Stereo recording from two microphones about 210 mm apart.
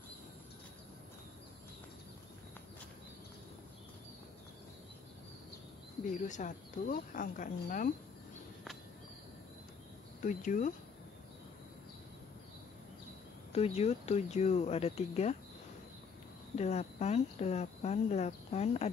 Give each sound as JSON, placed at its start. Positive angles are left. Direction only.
{"t": 6.2, "sound": "speech", "side_deg": 35}
{"t": 10.2, "sound": "speech", "side_deg": 35}
{"t": 13.5, "sound": "speech", "side_deg": 30}
{"t": 16.5, "sound": "speech", "side_deg": 30}